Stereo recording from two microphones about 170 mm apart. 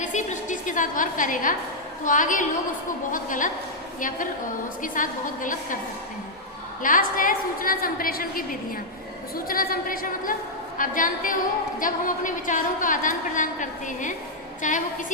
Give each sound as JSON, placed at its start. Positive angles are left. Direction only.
{"t": 0.0, "sound": "a sound", "side_deg": 45}
{"t": 2.0, "sound": "a woman's voice", "side_deg": 50}
{"t": 4.8, "sound": "a woman's voice", "side_deg": 50}
{"t": 6.8, "sound": "a woman's voice", "side_deg": 50}